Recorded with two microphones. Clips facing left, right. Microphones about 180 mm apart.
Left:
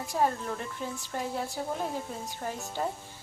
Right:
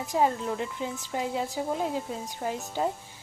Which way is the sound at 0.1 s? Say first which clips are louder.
Right 3 dB; 15° right (ahead or behind).